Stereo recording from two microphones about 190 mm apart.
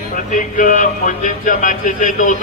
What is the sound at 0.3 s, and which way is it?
A man's voice, 40° left (ahead or behind).